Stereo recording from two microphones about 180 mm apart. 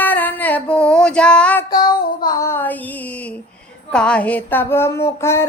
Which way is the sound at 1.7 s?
25° left (ahead or behind).